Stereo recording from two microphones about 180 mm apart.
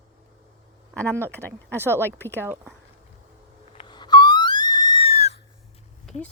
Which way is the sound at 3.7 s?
25° left (ahead or behind).